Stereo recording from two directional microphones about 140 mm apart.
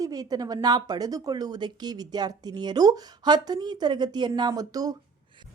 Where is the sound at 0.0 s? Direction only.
30° right (ahead or behind).